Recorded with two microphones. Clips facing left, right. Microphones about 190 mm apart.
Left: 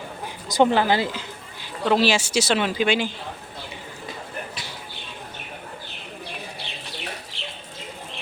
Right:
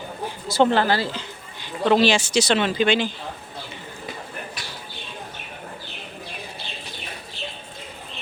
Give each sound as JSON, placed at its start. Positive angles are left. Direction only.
{"t": 0.4, "sound": "speech", "side_deg": 15}
{"t": 1.6, "sound": "speech", "side_deg": 5}
{"t": 6.7, "sound": "bird", "side_deg": 75}
{"t": 7.3, "sound": "bird", "side_deg": 85}